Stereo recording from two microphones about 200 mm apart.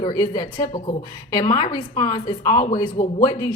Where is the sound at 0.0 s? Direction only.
20° left (ahead or behind).